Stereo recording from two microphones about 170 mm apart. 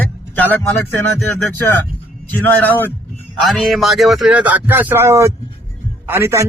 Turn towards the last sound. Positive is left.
turn(degrees=-15)  # may be behind; listen again after turning